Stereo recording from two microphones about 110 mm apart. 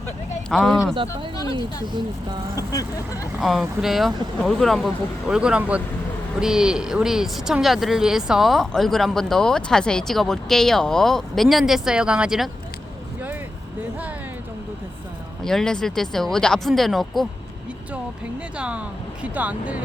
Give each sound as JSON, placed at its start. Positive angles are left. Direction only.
{"t": 0.5, "sound": "speech", "side_deg": 5}
{"t": 2.6, "sound": "speech", "side_deg": 30}
{"t": 3.4, "sound": "speech", "side_deg": -5}
{"t": 15.4, "sound": "speech", "side_deg": 5}
{"t": 18.5, "sound": "speech", "side_deg": -10}